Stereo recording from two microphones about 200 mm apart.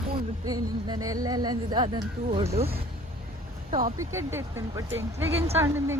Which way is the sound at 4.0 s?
15° right (ahead or behind).